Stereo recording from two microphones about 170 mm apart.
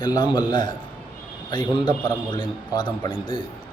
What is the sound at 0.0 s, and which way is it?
Mantra, 25° left (ahead or behind).